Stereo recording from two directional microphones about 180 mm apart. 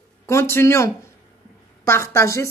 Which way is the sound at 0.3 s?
15° left (ahead or behind).